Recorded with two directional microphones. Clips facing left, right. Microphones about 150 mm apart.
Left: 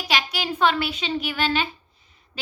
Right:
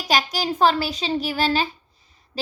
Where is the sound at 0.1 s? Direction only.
40° right (ahead or behind).